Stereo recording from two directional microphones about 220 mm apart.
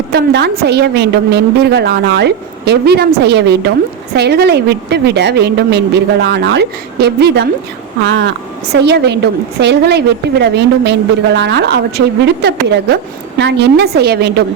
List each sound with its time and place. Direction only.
0.1 s a woman's voice: 50° right (ahead or behind)
8.7 s a woman's voice: 50° right (ahead or behind)